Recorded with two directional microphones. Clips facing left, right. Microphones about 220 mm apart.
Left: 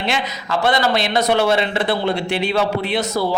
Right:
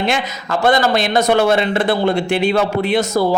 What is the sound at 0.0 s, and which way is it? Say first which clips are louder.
A man's voice: right 3 dB; 50° right (ahead or behind).